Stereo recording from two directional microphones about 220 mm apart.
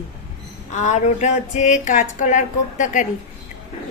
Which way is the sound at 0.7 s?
35° left (ahead or behind).